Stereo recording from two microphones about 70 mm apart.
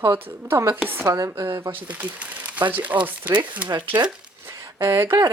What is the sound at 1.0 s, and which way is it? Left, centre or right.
Speech, right.